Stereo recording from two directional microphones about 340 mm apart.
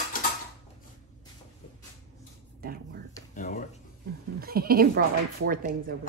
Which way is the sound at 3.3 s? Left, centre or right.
Left.